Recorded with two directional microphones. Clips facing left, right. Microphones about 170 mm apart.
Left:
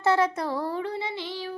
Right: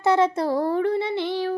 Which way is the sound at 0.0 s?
20° right (ahead or behind).